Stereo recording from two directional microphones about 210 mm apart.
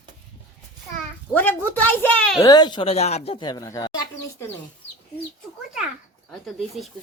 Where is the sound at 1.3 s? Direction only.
10° left (ahead or behind).